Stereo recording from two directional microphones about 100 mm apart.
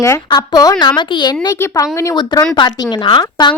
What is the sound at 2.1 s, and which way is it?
A woman's voice, 50° left (ahead or behind).